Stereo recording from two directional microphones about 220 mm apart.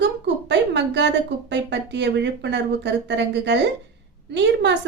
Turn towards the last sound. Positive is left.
turn(degrees=-50)  # may be behind; listen again after turning